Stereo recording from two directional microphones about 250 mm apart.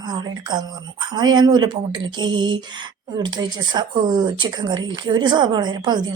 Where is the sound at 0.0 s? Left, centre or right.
Centre.